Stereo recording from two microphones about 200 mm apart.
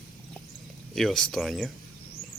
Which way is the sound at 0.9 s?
Centre (ahead or behind).